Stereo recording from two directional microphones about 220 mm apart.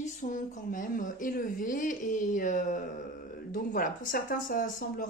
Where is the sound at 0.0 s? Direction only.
35° left (ahead or behind).